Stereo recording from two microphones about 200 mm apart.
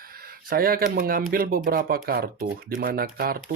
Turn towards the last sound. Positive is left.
turn(degrees=-45)  # may be behind; listen again after turning